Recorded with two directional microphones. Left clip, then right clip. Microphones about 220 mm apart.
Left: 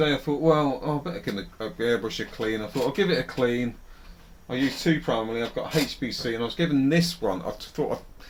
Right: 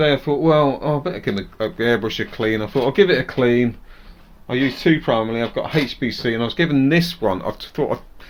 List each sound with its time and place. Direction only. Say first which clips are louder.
0.0 s speech: right 6 dB; 45° right (ahead or behind)